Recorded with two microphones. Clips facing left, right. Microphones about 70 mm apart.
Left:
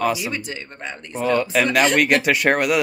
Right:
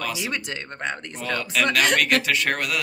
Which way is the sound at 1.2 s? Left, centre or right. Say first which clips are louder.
Left 6 dB; centre.